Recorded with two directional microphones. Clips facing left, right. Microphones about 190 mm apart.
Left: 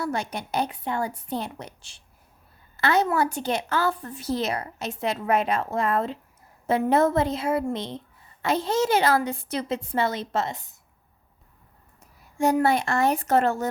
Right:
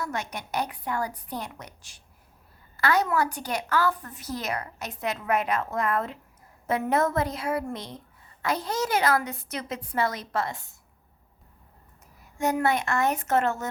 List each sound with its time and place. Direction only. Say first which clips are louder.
0.0 s a woman's voice: left 4 dB; 30° left (ahead or behind)
12.4 s a child's voice: left 4 dB; 30° left (ahead or behind)